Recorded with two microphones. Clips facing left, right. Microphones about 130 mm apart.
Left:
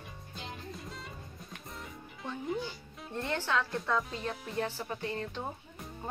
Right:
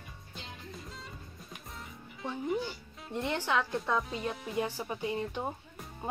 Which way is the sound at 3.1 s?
15° right (ahead or behind).